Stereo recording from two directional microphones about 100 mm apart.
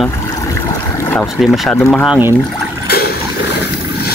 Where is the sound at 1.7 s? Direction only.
10° left (ahead or behind).